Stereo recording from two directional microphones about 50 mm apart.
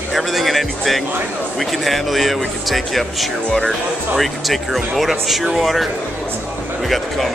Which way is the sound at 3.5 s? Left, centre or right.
Centre.